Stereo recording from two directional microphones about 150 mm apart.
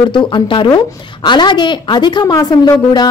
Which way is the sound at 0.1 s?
30° left (ahead or behind).